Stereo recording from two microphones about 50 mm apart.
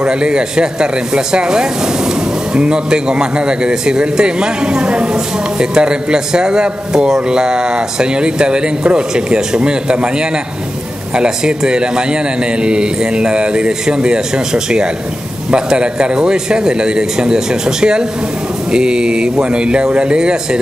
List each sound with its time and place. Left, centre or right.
0.0 s speech: centre